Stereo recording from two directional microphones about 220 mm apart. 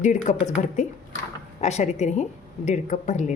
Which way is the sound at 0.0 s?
35° left (ahead or behind).